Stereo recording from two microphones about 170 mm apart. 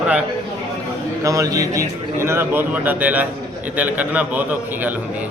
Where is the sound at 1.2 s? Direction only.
20° right (ahead or behind).